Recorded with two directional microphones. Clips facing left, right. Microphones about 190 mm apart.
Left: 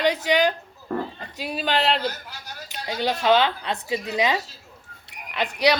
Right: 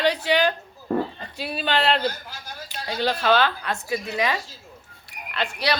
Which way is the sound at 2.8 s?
15° left (ahead or behind).